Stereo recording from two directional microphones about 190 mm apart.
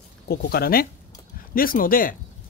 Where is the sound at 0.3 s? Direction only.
55° left (ahead or behind).